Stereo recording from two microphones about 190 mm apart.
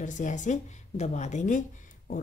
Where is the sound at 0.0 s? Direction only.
40° left (ahead or behind).